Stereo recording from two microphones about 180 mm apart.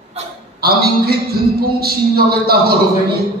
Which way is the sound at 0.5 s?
60° right (ahead or behind).